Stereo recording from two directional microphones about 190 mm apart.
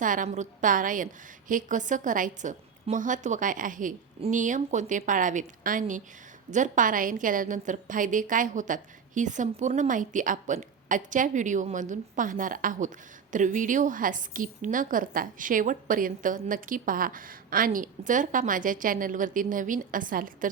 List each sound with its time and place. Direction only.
0.0 s a woman's voice: 45° right (ahead or behind)